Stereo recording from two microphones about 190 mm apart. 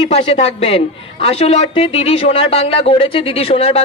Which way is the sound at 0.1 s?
35° left (ahead or behind).